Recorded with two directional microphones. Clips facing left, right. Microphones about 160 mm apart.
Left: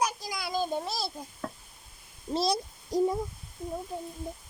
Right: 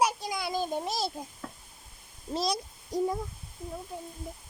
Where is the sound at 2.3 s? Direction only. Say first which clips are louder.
Left 2 dB; 30° left (ahead or behind).